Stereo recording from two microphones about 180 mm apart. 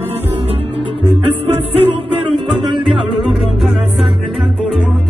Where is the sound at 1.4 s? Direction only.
30° right (ahead or behind).